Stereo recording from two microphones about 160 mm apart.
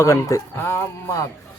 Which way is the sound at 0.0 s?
20° left (ahead or behind).